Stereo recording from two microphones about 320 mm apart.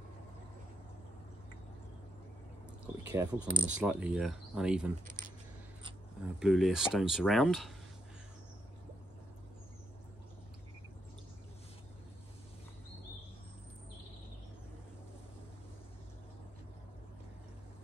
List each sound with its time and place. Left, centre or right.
3.0 s speech: centre
3.8 s speech: centre
5.0 s keys jangling: right
6.4 s speech: centre